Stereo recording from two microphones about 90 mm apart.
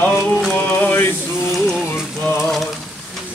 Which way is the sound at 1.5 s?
Centre (ahead or behind).